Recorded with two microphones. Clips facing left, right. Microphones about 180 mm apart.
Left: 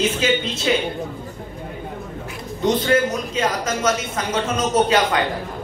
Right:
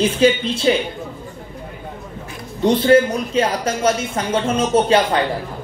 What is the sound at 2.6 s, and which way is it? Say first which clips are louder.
A man's voice: right 5 dB; 30° right (ahead or behind).